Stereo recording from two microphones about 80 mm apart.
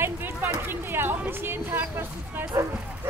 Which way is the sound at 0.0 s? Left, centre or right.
Right.